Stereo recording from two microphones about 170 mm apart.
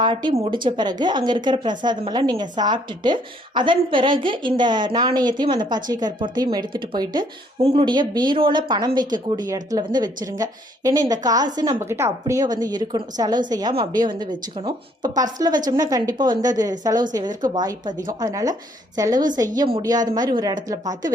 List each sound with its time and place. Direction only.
0.0 s speech: 25° right (ahead or behind)
19.5 s a woman's voice: 35° right (ahead or behind)
19.8 s speech: 20° right (ahead or behind)